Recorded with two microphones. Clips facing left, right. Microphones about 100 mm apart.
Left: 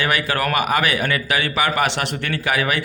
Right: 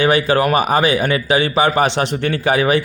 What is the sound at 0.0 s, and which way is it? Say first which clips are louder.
Speech: right 7 dB; 25° right (ahead or behind).